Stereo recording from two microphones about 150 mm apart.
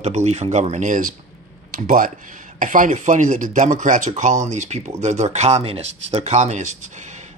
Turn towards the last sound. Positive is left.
turn(degrees=-50)  # may be behind; listen again after turning